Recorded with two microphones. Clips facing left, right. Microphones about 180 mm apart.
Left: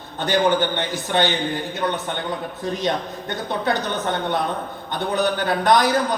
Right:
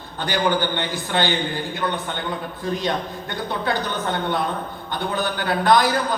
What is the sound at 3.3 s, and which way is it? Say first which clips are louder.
A man's voice: left 2 dB; 20° left (ahead or behind).